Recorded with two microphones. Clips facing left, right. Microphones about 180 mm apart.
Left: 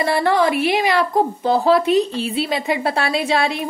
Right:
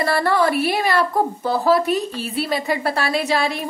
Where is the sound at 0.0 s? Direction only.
20° left (ahead or behind).